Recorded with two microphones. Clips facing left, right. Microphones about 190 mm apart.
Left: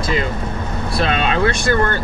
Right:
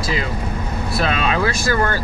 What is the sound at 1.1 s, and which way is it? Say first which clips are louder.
Speech: left 2 dB; 30° left (ahead or behind).